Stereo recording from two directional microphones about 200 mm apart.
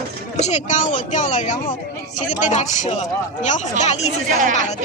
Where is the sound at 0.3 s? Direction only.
35° left (ahead or behind).